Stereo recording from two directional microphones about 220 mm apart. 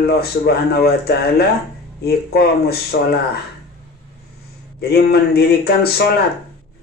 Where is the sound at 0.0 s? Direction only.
45° left (ahead or behind).